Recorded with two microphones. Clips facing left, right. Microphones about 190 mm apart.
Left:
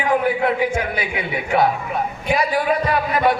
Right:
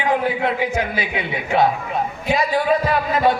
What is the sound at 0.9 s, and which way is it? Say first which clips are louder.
Music: even; 25° right (ahead or behind).